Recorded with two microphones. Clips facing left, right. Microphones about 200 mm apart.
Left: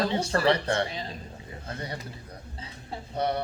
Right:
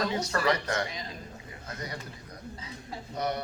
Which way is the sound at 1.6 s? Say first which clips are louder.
Left 3 dB; 30° left (ahead or behind).